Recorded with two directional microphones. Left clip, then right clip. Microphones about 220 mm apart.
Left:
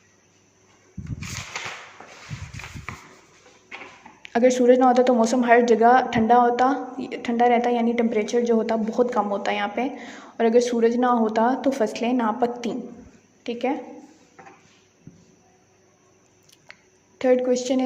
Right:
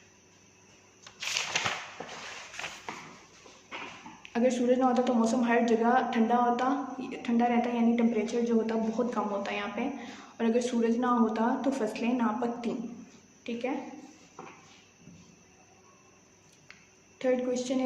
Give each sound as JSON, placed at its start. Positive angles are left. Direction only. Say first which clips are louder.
{"t": 2.0, "sound": "a sound", "louder": "right 2 dB", "side_deg": 5}
{"t": 4.2, "sound": "a woman's voice", "louder": "left 10 dB", "side_deg": 35}
{"t": 17.2, "sound": "a woman's voice", "louder": "left 9 dB", "side_deg": 35}